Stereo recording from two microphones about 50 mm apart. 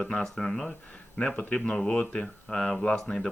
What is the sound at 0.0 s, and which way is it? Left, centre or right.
Speech, centre.